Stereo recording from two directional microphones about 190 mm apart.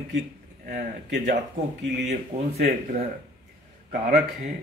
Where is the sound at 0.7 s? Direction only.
55° right (ahead or behind).